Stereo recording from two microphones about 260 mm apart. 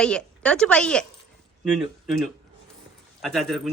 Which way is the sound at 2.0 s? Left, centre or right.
Centre.